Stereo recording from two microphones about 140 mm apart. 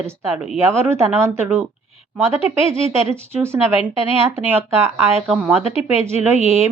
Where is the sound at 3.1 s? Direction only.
15° right (ahead or behind).